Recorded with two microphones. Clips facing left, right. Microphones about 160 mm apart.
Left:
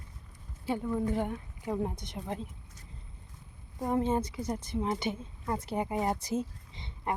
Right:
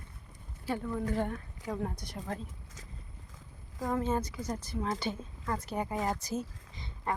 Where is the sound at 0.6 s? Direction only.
20° left (ahead or behind).